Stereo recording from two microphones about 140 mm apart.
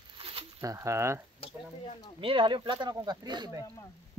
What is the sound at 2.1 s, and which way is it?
Speech, 35° right (ahead or behind).